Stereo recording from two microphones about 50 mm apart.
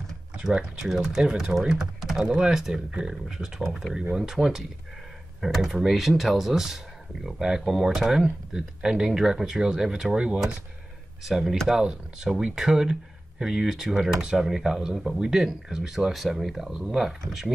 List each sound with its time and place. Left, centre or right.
0.4 s speech: centre
11.2 s speech: centre